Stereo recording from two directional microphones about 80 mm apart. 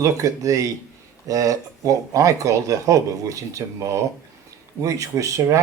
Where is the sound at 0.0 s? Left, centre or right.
Right.